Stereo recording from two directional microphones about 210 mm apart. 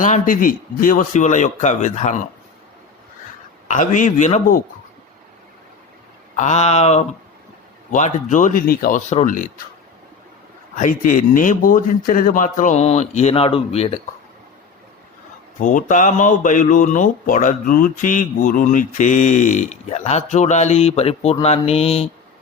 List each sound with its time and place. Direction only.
0.0 s speech: 40° left (ahead or behind)
3.7 s speech: 35° left (ahead or behind)
6.3 s speech: 35° left (ahead or behind)
10.8 s speech: 40° left (ahead or behind)
15.5 s speech: 40° left (ahead or behind)